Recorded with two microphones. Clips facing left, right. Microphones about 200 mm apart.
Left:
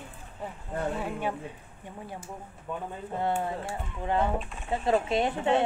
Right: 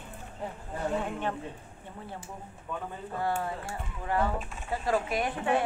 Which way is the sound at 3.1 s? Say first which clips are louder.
Left 2 dB; 20° left (ahead or behind).